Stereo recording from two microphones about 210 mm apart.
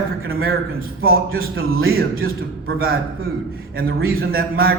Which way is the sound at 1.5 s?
75° right (ahead or behind).